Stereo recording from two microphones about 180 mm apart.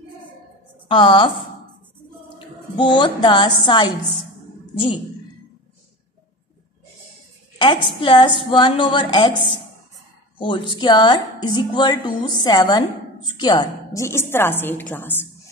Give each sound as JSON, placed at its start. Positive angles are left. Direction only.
{"t": 0.8, "sound": "a woman's voice", "side_deg": 30}
{"t": 7.5, "sound": "a woman's voice", "side_deg": 30}
{"t": 10.4, "sound": "a woman's voice", "side_deg": 25}